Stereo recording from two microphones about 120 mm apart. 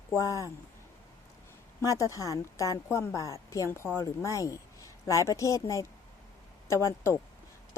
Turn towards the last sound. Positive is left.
turn(degrees=25)  # may be behind; listen again after turning